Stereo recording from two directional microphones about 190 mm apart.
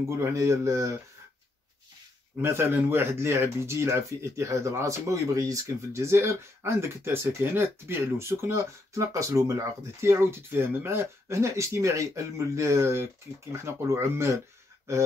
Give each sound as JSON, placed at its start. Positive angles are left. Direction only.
{"t": 0.1, "sound": "speech", "side_deg": -15}
{"t": 2.4, "sound": "speech", "side_deg": -15}